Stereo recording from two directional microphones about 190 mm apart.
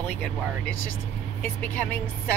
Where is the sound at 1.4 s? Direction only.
10° left (ahead or behind).